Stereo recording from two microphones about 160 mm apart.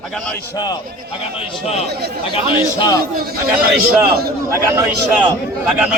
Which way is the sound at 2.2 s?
30° left (ahead or behind).